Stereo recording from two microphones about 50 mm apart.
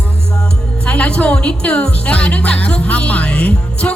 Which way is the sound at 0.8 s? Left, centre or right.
Left.